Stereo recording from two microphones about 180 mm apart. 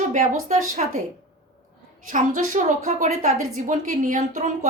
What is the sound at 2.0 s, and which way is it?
Speech, 45° right (ahead or behind).